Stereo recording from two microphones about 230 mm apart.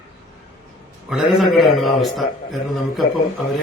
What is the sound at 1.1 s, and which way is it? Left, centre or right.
A man's voice, centre.